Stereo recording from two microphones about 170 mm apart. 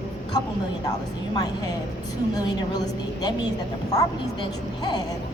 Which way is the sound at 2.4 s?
25° left (ahead or behind).